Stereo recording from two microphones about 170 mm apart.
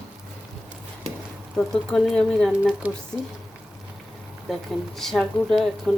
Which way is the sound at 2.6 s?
5° right (ahead or behind).